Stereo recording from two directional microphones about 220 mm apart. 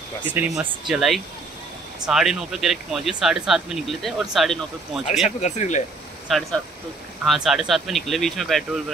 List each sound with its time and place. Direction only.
0.3 s speech: 5° right (ahead or behind)
5.2 s speech: 30° left (ahead or behind)
6.2 s speech: centre (ahead or behind)